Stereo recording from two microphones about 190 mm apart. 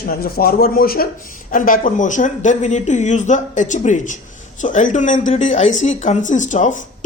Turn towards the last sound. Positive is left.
turn(degrees=40)  # may be behind; listen again after turning